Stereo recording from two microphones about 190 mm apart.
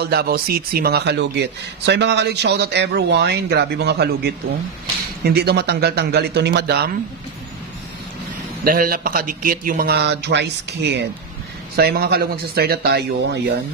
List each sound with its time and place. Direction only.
0.0 s speech: 55° right (ahead or behind)
8.6 s a man's voice: 50° right (ahead or behind)